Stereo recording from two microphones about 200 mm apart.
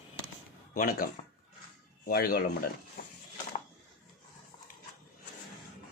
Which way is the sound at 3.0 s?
40° left (ahead or behind).